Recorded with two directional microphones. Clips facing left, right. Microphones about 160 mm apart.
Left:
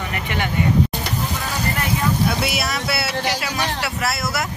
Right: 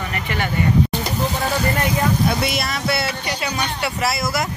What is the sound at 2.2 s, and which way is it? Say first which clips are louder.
Speech: right 1 dB; 5° left (ahead or behind).